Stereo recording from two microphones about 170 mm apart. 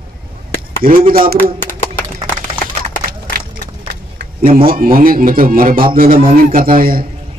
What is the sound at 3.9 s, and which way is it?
A man's voice, 65° right (ahead or behind).